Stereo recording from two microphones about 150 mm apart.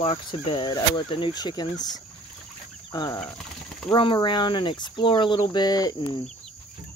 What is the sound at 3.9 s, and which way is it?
Cricket, 35° left (ahead or behind).